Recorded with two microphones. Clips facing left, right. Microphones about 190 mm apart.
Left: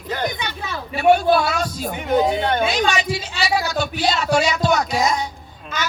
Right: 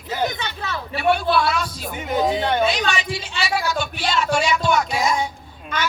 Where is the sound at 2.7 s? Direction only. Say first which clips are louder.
Left 4 dB; 40° left (ahead or behind).